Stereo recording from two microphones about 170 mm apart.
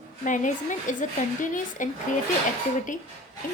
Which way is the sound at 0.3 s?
50° left (ahead or behind).